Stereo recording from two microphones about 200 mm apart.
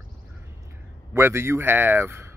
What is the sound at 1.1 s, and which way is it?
Speech, 15° right (ahead or behind).